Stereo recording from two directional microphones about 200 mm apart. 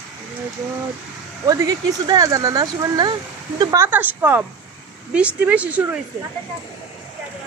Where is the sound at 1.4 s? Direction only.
20° right (ahead or behind).